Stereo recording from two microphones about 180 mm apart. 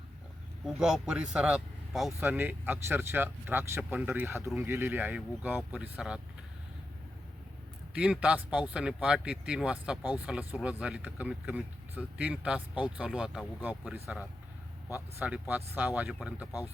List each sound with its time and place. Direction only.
0.6 s speech: 5° right (ahead or behind)
7.9 s speech: 5° right (ahead or behind)